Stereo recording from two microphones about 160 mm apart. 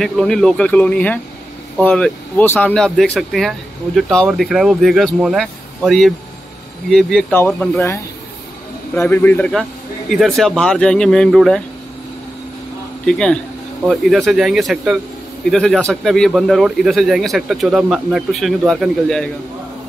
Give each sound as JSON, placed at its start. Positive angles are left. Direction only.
{"t": 0.0, "sound": "speech", "side_deg": 5}
{"t": 9.0, "sound": "speech", "side_deg": 15}
{"t": 9.5, "sound": "speech", "side_deg": 0}
{"t": 13.0, "sound": "speech", "side_deg": 5}